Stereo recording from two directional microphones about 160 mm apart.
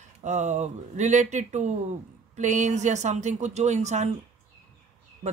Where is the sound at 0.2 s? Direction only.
45° right (ahead or behind).